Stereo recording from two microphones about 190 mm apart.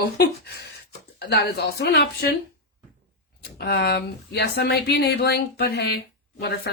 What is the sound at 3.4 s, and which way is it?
Speech, 55° left (ahead or behind).